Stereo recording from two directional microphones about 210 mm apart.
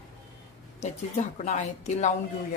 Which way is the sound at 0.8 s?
35° left (ahead or behind).